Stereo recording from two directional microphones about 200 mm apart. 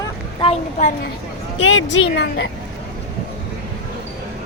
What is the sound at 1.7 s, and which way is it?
Speech, 65° left (ahead or behind).